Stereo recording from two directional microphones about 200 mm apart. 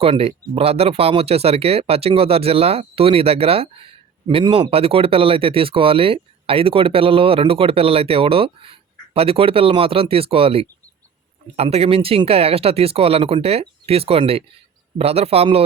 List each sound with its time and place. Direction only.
0.0 s a man's voice: 30° right (ahead or behind)